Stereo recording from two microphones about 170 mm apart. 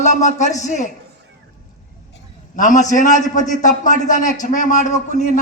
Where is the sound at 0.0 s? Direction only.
45° left (ahead or behind).